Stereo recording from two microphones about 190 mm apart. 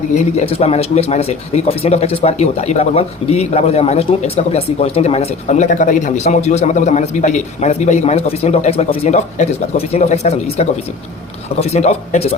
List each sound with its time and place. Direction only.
0.1 s speech: 35° left (ahead or behind)